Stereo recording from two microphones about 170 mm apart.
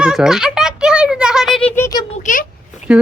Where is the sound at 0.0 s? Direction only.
5° right (ahead or behind).